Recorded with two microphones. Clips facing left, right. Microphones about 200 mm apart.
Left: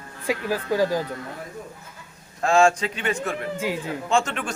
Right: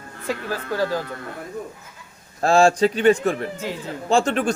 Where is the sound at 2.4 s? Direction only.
35° right (ahead or behind).